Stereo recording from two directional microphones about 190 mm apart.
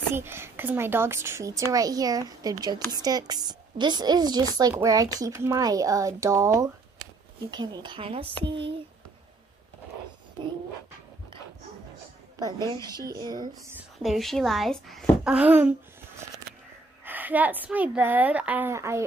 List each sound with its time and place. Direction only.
0.1 s a woman's voice: 10° right (ahead or behind); by 8.7 s 30° right (ahead or behind)
12.4 s a woman's voice: 20° right (ahead or behind)
13.7 s a child's voice: centre (ahead or behind)
17.0 s speech: 10° right (ahead or behind)